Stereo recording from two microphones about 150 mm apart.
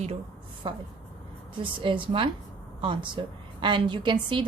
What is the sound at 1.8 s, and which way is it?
A woman's voice, 35° right (ahead or behind).